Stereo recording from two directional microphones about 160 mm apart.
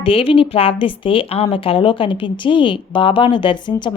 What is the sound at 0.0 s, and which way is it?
A woman's voice, 35° left (ahead or behind).